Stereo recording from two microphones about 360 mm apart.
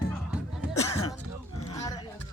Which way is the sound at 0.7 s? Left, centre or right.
Centre.